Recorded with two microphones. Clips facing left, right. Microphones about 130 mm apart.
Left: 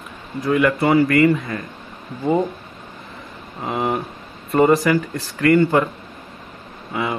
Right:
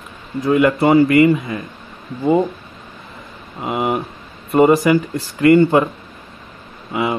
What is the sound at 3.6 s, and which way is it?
Speech, 10° right (ahead or behind).